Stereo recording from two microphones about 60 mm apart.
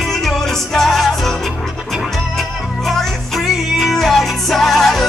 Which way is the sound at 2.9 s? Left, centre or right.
Centre.